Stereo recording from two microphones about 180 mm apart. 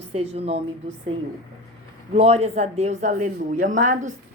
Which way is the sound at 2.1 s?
35° right (ahead or behind).